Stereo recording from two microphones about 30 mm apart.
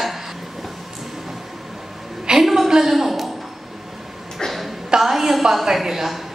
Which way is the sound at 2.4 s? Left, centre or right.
Centre.